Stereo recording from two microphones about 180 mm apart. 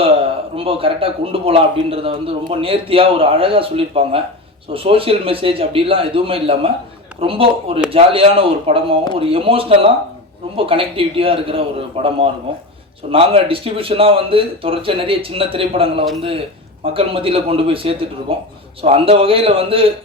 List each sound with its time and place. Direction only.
0.5 s speech: 30° right (ahead or behind)